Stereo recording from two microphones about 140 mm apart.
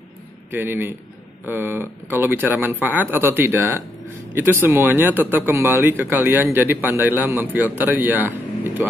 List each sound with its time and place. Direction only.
0.5 s speech: 15° right (ahead or behind)